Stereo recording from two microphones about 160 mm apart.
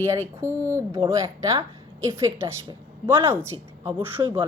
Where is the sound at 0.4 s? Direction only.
15° right (ahead or behind).